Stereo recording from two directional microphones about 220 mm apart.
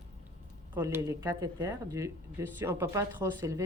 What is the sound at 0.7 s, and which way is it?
A woman's voice, 10° right (ahead or behind).